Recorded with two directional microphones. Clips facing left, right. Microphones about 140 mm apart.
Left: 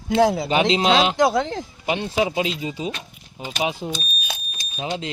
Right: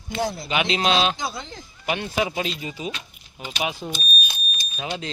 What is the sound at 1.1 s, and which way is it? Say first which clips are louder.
Speech: left 13 dB; 75° left (ahead or behind).